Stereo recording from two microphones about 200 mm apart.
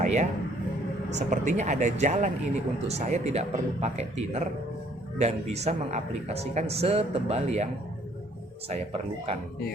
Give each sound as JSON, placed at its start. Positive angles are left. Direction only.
{"t": 0.0, "sound": "a sound", "side_deg": -35}
{"t": 1.1, "sound": "a woman's voice", "side_deg": -35}
{"t": 8.7, "sound": "speech", "side_deg": -30}